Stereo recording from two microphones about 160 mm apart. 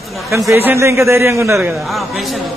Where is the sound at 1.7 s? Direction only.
Centre (ahead or behind).